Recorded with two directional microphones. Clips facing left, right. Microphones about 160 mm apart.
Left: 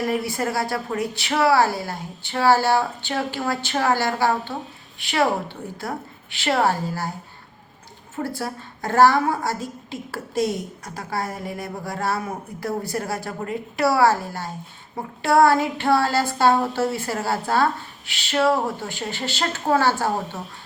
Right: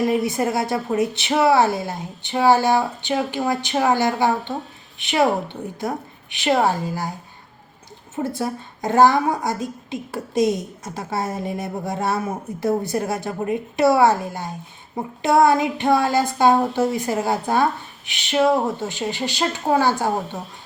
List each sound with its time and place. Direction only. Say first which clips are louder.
0.0 s a woman's voice: right 4 dB; 20° right (ahead or behind)
8.1 s a woman's voice: right 3 dB; 20° right (ahead or behind)